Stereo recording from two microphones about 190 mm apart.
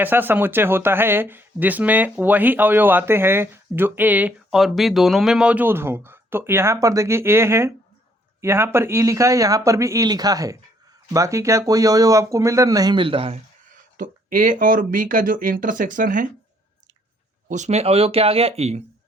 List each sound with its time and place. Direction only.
0.0 s speech: 10° right (ahead or behind); by 13.4 s 30° right (ahead or behind)
13.9 s speech: 45° right (ahead or behind)
17.5 s speech: 35° right (ahead or behind)